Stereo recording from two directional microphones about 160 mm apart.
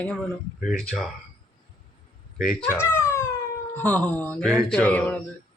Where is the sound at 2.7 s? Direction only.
15° left (ahead or behind).